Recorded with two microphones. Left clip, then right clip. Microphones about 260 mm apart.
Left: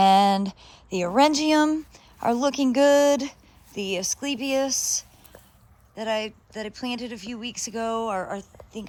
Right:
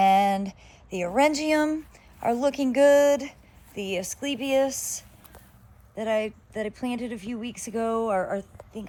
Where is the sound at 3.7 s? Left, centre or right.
Left.